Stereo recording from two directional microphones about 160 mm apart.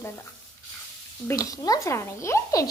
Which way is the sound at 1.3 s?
20° left (ahead or behind).